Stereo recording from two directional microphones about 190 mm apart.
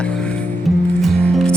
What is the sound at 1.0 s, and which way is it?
Music, centre (ahead or behind).